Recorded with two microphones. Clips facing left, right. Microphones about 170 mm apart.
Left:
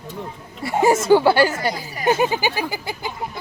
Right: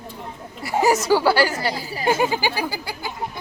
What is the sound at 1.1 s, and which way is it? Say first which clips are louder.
Speech: left 3 dB; 20° left (ahead or behind).